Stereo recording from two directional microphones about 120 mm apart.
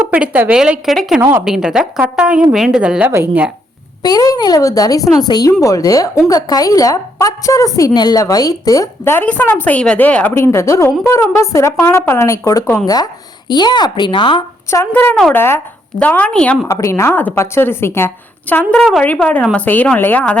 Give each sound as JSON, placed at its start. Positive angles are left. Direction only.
{"t": 0.1, "sound": "a woman's voice", "side_deg": -10}
{"t": 1.2, "sound": "speech", "side_deg": -20}
{"t": 1.5, "sound": "a woman's voice", "side_deg": -5}
{"t": 3.1, "sound": "speech", "side_deg": -20}
{"t": 4.0, "sound": "a woman's voice", "side_deg": 30}
{"t": 14.7, "sound": "a woman's voice", "side_deg": 20}
{"t": 16.6, "sound": "a woman's voice", "side_deg": 25}
{"t": 18.7, "sound": "a woman's voice", "side_deg": 5}